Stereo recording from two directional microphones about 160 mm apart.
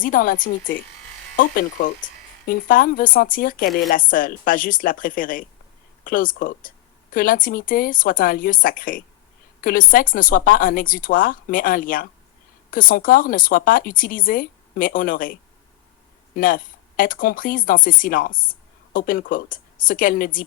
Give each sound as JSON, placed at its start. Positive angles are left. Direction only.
{"t": 0.0, "sound": "speech", "side_deg": 60}